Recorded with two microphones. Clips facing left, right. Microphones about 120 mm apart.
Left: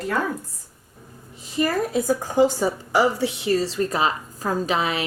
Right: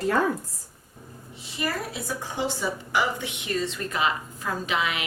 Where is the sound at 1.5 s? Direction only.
45° left (ahead or behind).